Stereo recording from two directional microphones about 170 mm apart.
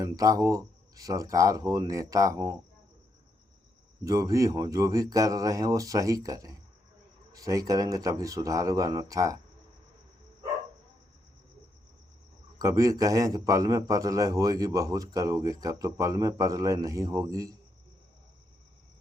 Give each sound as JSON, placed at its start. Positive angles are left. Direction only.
{"t": 0.0, "sound": "a man's voice", "side_deg": -20}
{"t": 4.0, "sound": "a man's voice", "side_deg": -20}
{"t": 12.5, "sound": "a man's voice", "side_deg": -20}